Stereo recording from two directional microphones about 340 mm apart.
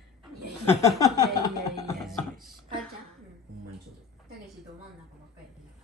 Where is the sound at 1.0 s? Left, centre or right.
Centre.